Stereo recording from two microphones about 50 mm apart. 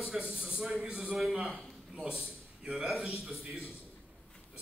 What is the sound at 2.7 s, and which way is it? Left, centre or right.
Speech, centre.